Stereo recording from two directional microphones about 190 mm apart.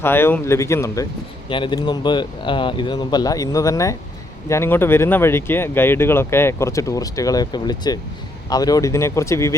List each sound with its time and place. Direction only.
0.0 s speech: 10° left (ahead or behind)